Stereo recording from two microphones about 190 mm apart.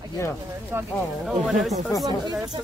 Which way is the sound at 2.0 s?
20° right (ahead or behind).